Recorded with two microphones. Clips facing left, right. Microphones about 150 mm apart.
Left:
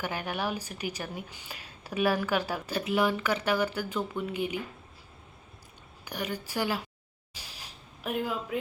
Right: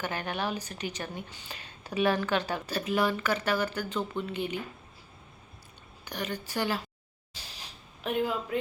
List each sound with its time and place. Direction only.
0.0 s a woman's voice: 10° left (ahead or behind)
6.1 s a woman's voice: 10° left (ahead or behind)
8.0 s speech: 5° left (ahead or behind)